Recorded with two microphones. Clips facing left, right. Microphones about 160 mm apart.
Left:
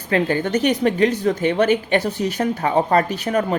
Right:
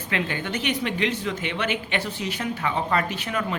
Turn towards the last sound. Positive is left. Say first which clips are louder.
# left 8 dB
turn(degrees=40)  # may be behind; listen again after turning